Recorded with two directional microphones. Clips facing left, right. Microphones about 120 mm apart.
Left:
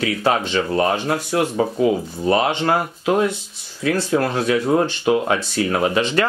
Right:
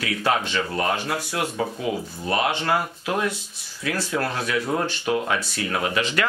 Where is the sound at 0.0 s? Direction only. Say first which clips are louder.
Left 4 dB; 25° left (ahead or behind).